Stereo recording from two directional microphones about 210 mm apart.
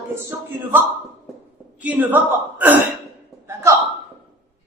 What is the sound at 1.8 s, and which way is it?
A woman's voice, 10° right (ahead or behind).